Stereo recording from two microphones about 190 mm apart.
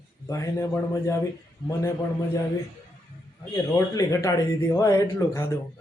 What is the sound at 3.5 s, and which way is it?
A man's voice, 15° left (ahead or behind).